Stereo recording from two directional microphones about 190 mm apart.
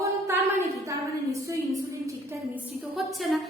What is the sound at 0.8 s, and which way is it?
Speech, 15° right (ahead or behind).